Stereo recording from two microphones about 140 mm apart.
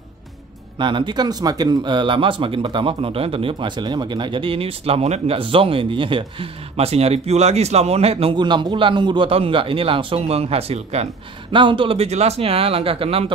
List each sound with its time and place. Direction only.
0.7 s speech: 35° right (ahead or behind)
11.5 s speech: 35° right (ahead or behind)